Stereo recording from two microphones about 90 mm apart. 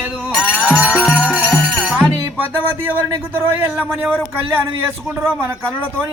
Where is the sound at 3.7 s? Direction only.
5° right (ahead or behind).